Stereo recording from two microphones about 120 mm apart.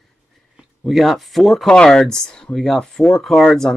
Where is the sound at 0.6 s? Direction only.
Centre (ahead or behind).